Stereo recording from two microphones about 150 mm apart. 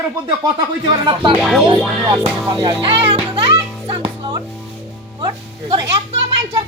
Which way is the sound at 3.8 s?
35° right (ahead or behind).